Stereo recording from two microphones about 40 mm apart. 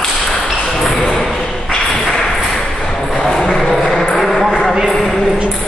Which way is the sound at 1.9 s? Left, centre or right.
Centre.